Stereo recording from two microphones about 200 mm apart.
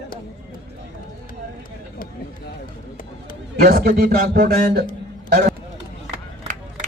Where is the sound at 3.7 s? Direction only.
45° right (ahead or behind).